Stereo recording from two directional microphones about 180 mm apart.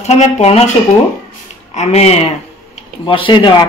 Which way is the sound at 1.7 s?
40° left (ahead or behind).